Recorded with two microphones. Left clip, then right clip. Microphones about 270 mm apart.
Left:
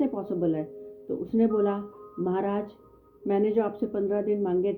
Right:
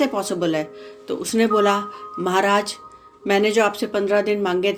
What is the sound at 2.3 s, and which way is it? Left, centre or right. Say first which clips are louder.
Speech: right 13 dB; centre.